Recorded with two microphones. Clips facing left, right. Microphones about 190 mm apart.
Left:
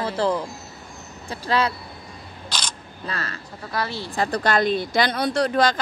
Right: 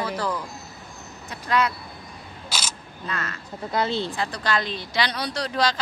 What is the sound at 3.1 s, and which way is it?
Speech, 35° left (ahead or behind).